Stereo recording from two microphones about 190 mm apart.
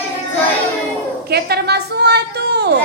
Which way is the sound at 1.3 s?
55° right (ahead or behind).